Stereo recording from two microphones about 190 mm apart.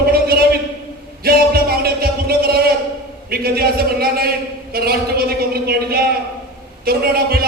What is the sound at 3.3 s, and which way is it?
A man's voice, 55° right (ahead or behind).